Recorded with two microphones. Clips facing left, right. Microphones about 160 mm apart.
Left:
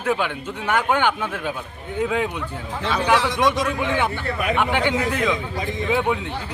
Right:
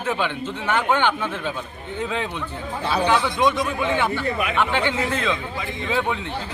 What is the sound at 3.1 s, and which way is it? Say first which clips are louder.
Speech: left 3 dB; 90° left.